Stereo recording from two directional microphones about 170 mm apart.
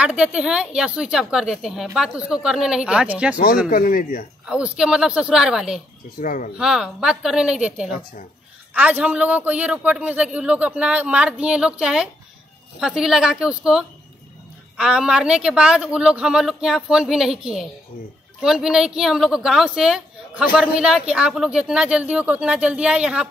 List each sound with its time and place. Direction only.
0.0 s speech: 5° right (ahead or behind)
3.7 s speech: 55° left (ahead or behind)
4.5 s speech: 5° right (ahead or behind)
6.1 s speech: 50° left (ahead or behind)
6.5 s a man's voice: 5° right (ahead or behind)